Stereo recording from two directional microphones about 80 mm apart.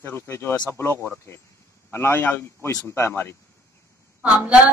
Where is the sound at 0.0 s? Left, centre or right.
Left.